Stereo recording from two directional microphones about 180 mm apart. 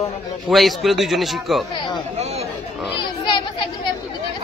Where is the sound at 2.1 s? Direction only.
35° right (ahead or behind).